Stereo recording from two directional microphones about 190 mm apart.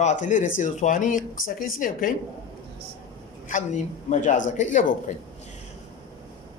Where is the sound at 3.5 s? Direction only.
40° left (ahead or behind).